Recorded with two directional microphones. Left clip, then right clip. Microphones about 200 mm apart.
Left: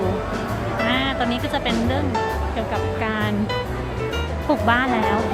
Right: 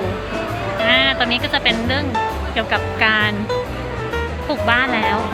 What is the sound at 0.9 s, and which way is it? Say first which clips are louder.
Speech: right 8 dB; 15° left (ahead or behind).